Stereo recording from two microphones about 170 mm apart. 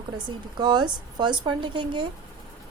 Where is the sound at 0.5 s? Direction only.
25° right (ahead or behind).